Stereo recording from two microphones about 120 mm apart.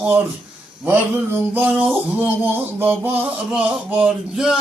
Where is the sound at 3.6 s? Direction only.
10° right (ahead or behind).